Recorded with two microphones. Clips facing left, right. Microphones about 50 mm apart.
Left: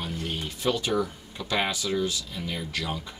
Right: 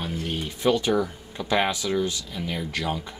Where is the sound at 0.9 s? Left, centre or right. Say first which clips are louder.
Right 3 dB; centre.